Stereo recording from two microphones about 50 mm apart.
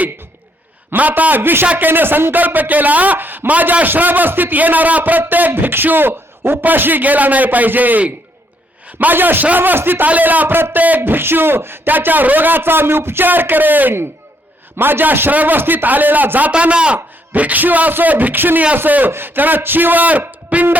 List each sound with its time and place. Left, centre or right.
0.9 s a man's voice: right
1.6 s a man's voice: right
1.9 s a man's voice: right
10.1 s a man's voice: right
15.3 s a man's voice: right
16.5 s a man's voice: right